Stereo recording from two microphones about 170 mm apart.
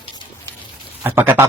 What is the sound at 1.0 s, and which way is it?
Speech, 10° right (ahead or behind).